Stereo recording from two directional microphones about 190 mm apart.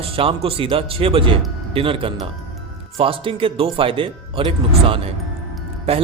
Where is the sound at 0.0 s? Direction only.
30° right (ahead or behind).